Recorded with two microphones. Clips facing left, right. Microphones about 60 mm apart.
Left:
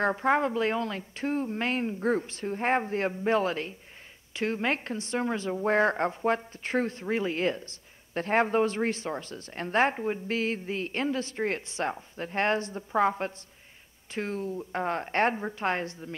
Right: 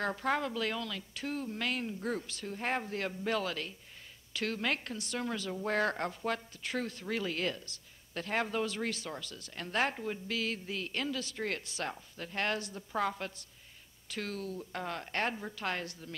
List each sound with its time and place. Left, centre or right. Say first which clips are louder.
0.0 s speech: left 8 dB; left